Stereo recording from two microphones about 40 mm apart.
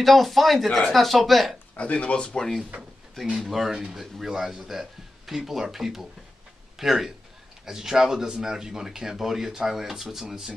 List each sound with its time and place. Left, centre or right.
0.0 s speech: centre
0.7 s speech: centre
0.9 s speech: centre
1.8 s speech: left
2.2 s speech: centre
2.7 s speech: right
3.3 s speech: centre
4.3 s a man's voice: centre